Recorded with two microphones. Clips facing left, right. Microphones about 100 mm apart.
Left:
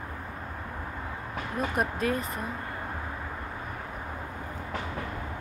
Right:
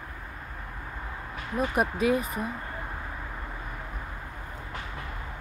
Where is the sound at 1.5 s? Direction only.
5° right (ahead or behind).